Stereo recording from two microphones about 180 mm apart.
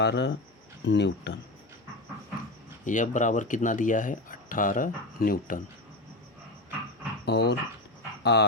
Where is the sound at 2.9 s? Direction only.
45° left (ahead or behind).